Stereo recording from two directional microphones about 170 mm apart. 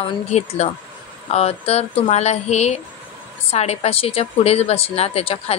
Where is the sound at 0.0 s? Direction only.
40° left (ahead or behind).